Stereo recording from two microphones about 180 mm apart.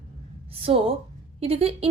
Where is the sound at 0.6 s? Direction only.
30° right (ahead or behind).